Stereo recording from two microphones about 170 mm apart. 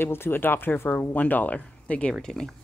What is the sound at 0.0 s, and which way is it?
A woman's voice, 15° left (ahead or behind).